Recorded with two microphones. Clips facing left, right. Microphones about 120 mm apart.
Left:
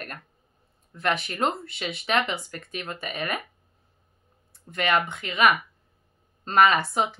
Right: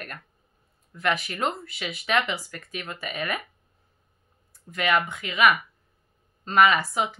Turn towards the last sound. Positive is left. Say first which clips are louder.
# even
turn(degrees=25)  # may be behind; listen again after turning